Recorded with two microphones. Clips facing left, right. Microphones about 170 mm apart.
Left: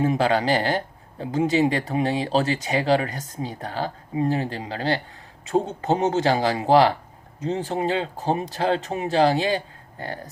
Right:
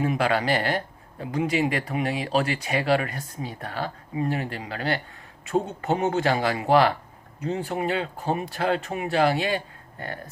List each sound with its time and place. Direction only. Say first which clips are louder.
0.0 s speech: left 3 dB; 30° left (ahead or behind)